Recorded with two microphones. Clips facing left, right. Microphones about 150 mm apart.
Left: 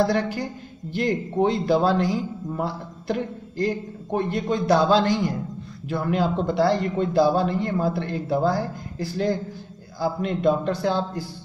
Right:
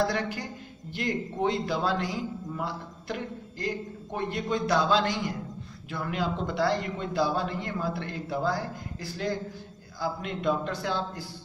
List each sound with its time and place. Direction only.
0.0 s speech: 35° left (ahead or behind)